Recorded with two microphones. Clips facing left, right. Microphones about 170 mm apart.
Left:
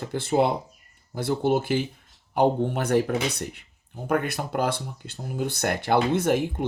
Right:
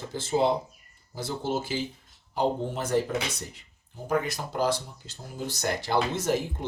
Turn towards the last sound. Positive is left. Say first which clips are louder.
# left 4 dB
turn(degrees=60)  # may be behind; listen again after turning